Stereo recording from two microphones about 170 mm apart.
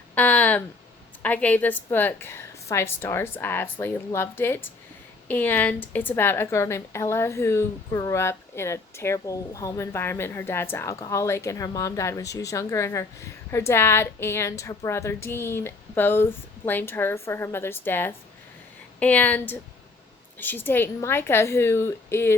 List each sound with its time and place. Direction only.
0.1 s a woman's voice: 10° left (ahead or behind)